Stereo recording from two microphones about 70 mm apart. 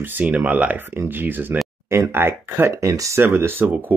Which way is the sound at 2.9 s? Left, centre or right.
Right.